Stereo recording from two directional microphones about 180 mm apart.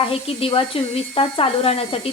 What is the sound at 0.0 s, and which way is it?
Speech, 30° left (ahead or behind).